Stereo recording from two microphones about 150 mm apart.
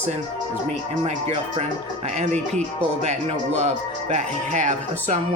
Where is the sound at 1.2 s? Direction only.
45° right (ahead or behind).